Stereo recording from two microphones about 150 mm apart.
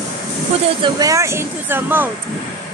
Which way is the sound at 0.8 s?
20° right (ahead or behind).